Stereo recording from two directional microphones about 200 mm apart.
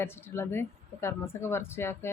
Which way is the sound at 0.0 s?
10° left (ahead or behind).